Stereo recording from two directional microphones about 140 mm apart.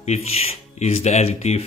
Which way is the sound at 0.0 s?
50° left (ahead or behind).